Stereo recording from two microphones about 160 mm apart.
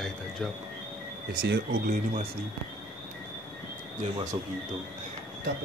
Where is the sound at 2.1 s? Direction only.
40° right (ahead or behind).